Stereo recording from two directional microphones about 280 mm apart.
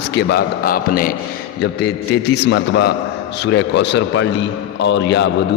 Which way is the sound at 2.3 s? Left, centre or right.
Left.